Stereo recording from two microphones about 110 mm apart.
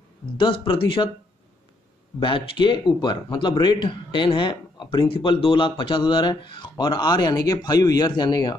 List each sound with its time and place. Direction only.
0.4 s speech: 50° left (ahead or behind)
2.1 s speech: 50° left (ahead or behind)